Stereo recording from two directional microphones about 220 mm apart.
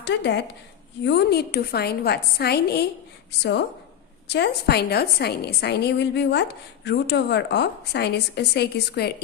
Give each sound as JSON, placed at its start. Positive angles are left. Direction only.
{"t": 0.0, "sound": "a woman's voice", "side_deg": 50}
{"t": 4.3, "sound": "a woman's voice", "side_deg": 50}